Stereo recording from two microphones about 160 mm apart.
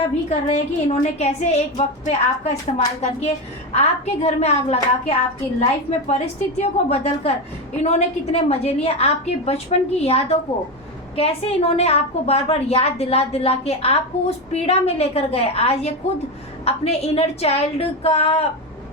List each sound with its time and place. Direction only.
0.0 s a woman's voice: 45° left (ahead or behind)